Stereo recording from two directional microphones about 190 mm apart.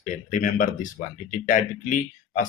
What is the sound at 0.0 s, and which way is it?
Speech, 40° left (ahead or behind).